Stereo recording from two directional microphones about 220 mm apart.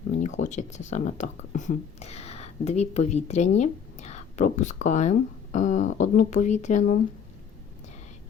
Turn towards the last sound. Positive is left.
turn(degrees=35)  # may be behind; listen again after turning